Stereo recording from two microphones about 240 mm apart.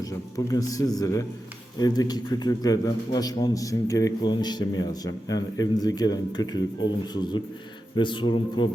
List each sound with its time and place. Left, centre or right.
0.3 s a man's voice: centre